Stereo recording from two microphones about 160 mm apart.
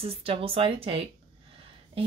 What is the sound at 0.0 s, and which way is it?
Speech, 35° right (ahead or behind).